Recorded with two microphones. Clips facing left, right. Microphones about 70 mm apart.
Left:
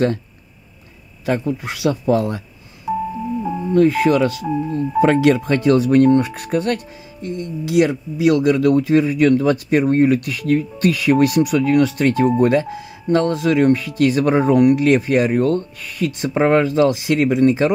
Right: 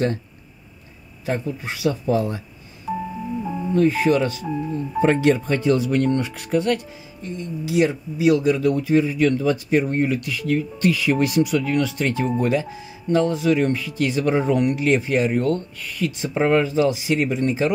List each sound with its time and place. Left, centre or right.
1.4 s speech: left
2.9 s music: centre
3.7 s speech: left